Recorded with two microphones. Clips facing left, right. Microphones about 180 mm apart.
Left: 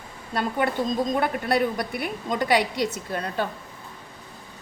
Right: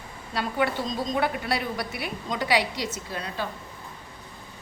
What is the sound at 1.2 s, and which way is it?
A woman's voice, 50° left (ahead or behind).